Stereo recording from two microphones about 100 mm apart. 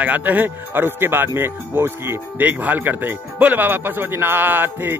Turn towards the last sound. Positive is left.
turn(degrees=-20)  # may be behind; listen again after turning